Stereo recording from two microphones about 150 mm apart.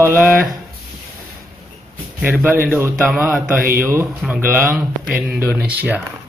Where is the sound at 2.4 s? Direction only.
15° right (ahead or behind).